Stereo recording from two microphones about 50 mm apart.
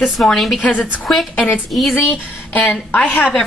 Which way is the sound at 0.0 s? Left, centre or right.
Centre.